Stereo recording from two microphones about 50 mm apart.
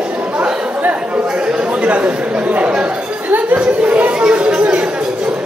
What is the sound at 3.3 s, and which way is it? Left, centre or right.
Speech, right.